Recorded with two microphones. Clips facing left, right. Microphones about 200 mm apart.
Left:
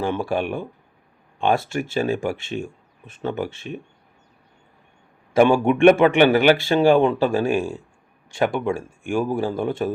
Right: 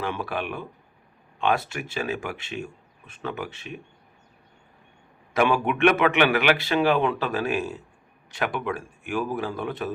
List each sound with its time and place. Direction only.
0.0 s a man's voice: 30° left (ahead or behind)
5.4 s a man's voice: 30° left (ahead or behind)